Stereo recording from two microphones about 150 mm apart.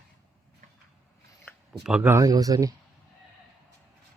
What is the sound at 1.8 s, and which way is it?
Speech, 10° right (ahead or behind).